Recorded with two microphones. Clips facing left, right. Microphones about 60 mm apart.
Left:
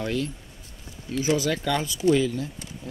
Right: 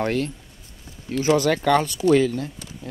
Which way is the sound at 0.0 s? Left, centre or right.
Right.